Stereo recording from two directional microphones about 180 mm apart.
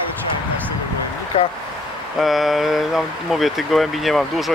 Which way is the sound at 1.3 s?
35° left (ahead or behind).